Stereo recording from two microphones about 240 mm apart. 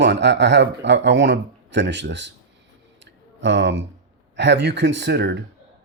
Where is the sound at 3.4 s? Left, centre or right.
Right.